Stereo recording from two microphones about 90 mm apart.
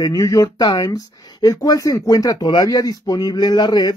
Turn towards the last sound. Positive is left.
turn(degrees=50)  # may be behind; listen again after turning